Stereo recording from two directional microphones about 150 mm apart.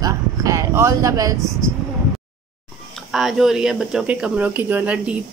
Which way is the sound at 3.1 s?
Centre (ahead or behind).